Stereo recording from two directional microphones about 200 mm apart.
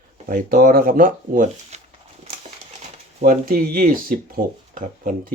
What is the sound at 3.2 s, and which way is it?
Speech, 45° right (ahead or behind).